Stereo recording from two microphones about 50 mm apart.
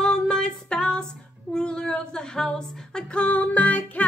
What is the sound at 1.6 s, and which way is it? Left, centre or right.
Singing, centre.